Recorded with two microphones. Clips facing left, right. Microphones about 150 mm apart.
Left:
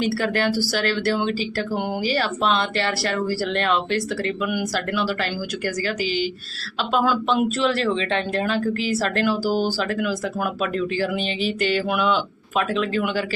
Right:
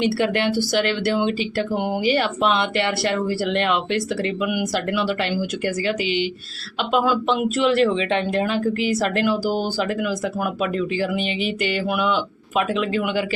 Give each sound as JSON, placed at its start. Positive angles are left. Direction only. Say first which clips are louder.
{"t": 0.0, "sound": "speech", "louder": "right 2 dB", "side_deg": -25}
{"t": 6.9, "sound": "speech", "louder": "right 1 dB", "side_deg": -15}